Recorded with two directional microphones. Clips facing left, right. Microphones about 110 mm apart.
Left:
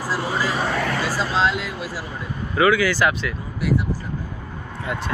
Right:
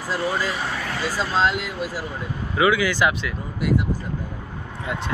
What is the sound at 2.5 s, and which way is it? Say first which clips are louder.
Speech: left 2 dB; 15° right (ahead or behind).